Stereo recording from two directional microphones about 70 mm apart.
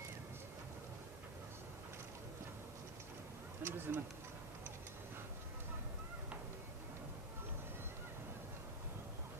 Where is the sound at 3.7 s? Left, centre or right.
Right.